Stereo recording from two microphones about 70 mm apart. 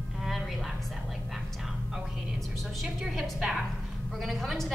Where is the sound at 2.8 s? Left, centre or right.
Centre.